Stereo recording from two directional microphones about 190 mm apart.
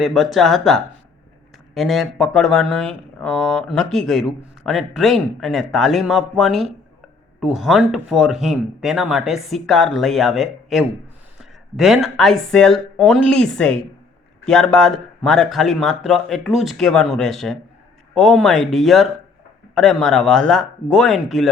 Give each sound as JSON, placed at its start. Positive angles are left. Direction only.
{"t": 0.0, "sound": "speech", "side_deg": 0}